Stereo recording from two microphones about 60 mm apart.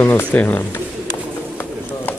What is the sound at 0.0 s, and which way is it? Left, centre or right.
Speech, left.